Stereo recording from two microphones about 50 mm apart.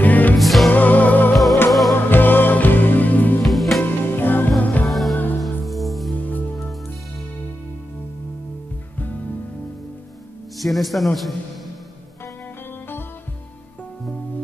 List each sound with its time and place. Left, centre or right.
0.0 s music: left
0.4 s music: centre
0.7 s music: left
1.3 s music: centre
2.0 s music: left
3.4 s music: centre
3.8 s music: left
4.8 s music: centre
6.1 s music: left
10.6 s a man's voice: centre